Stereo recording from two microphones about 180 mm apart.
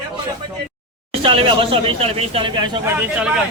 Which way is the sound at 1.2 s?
30° right (ahead or behind).